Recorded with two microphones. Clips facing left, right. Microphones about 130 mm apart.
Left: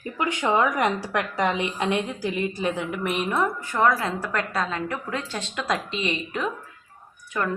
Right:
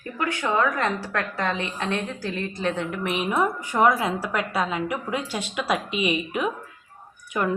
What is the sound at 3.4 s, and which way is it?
A woman's voice, 15° right (ahead or behind).